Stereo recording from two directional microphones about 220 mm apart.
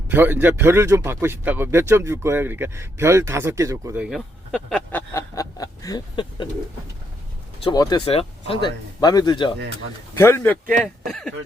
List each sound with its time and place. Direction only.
0.1 s a man's voice: 10° right (ahead or behind); by 6.5 s 20° left (ahead or behind)
7.6 s a man's voice: 20° left (ahead or behind); by 11.3 s centre (ahead or behind)